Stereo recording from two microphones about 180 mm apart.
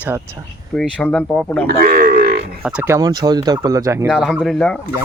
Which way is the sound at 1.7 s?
55° right (ahead or behind).